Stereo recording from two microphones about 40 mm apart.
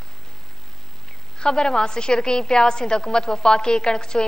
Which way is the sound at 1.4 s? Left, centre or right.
Centre.